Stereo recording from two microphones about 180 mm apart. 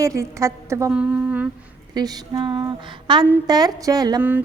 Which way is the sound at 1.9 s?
20° right (ahead or behind).